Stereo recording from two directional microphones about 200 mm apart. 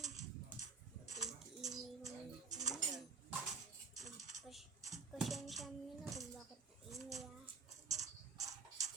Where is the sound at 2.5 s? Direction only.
35° right (ahead or behind).